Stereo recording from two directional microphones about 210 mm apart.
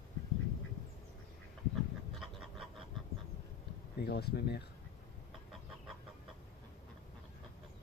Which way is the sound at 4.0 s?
50° left (ahead or behind).